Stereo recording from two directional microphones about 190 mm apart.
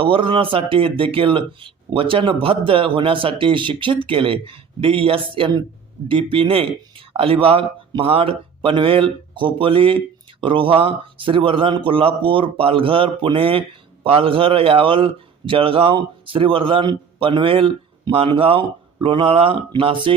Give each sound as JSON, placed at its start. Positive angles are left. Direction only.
{"t": 0.0, "sound": "speech", "side_deg": -25}